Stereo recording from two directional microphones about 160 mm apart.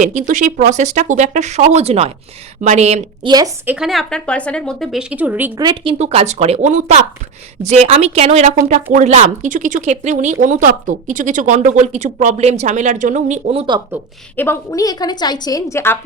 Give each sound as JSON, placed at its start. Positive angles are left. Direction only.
{"t": 0.0, "sound": "speech", "side_deg": -55}
{"t": 3.2, "sound": "a woman's voice", "side_deg": -25}
{"t": 3.7, "sound": "speech", "side_deg": 0}
{"t": 5.5, "sound": "speech", "side_deg": -30}
{"t": 14.3, "sound": "a woman's voice", "side_deg": 15}